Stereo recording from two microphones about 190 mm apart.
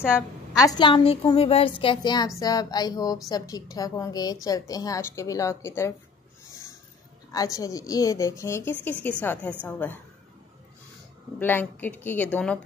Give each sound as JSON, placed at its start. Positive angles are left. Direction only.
{"t": 0.6, "sound": "a woman's voice", "side_deg": 20}
{"t": 7.3, "sound": "a woman's voice", "side_deg": 15}
{"t": 11.3, "sound": "a woman's voice", "side_deg": 10}